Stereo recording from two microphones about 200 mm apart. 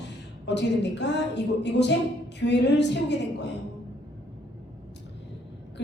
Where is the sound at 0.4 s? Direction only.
60° left (ahead or behind).